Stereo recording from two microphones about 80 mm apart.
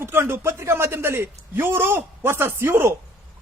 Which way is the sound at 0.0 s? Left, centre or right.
Right.